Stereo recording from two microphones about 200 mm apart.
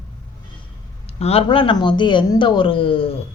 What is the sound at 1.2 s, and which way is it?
A woman's voice, 30° left (ahead or behind).